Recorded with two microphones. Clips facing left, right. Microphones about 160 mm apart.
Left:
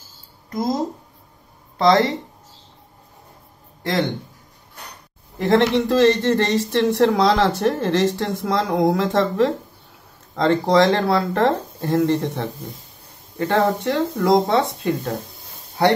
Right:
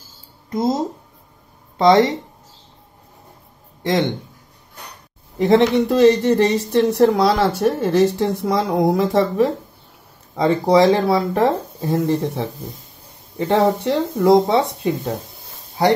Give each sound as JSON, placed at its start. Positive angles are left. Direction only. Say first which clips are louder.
{"t": 0.5, "sound": "speech", "louder": "right 3 dB", "side_deg": -25}
{"t": 1.8, "sound": "speech", "louder": "right 3 dB", "side_deg": -20}
{"t": 5.5, "sound": "speech", "louder": "right 2 dB", "side_deg": -15}